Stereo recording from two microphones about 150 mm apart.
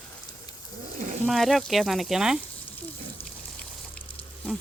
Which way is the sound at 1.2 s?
Centre (ahead or behind).